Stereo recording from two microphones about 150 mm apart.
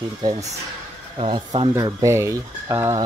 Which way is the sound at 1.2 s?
35° right (ahead or behind).